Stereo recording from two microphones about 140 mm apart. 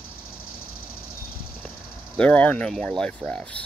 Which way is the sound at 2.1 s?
10° left (ahead or behind).